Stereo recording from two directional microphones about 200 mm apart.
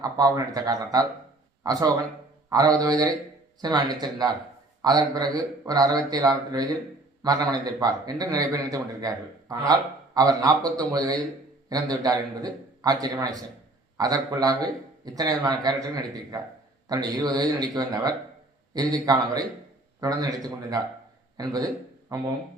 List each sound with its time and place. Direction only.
0.0 s a man's voice: 20° right (ahead or behind)